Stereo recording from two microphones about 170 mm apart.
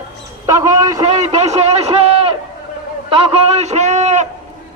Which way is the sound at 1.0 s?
40° right (ahead or behind).